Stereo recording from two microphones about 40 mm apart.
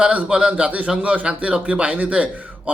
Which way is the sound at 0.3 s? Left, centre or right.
Right.